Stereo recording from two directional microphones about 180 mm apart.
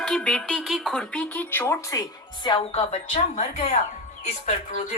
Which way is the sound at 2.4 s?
30° left (ahead or behind).